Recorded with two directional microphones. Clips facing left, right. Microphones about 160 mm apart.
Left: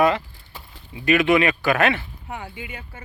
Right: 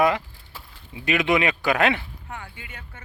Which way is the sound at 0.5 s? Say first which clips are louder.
Left 1 dB; 5° right (ahead or behind).